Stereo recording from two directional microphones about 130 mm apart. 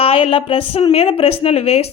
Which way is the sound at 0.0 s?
45° left (ahead or behind).